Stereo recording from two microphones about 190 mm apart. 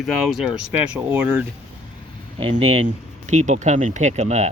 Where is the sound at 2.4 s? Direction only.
30° right (ahead or behind).